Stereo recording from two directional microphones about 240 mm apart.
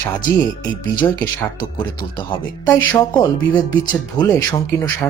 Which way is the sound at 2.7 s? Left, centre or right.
Centre.